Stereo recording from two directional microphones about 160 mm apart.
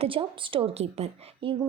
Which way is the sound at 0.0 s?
35° right (ahead or behind).